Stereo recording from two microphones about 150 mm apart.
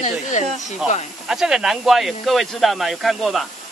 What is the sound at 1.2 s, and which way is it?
Speech, 5° right (ahead or behind).